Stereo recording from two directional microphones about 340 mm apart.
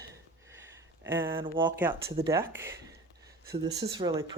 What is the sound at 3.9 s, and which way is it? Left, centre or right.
Speech, centre.